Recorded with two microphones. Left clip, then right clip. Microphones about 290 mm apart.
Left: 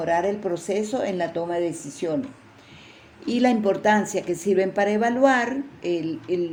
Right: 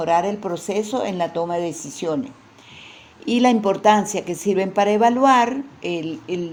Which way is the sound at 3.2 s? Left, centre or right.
Centre.